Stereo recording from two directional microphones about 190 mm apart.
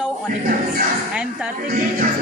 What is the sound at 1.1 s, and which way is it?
Speech, 5° right (ahead or behind).